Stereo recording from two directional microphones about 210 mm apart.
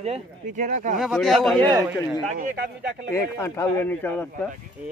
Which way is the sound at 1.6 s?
15° right (ahead or behind).